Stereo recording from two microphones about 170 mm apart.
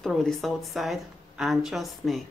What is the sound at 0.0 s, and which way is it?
A woman's voice, centre (ahead or behind).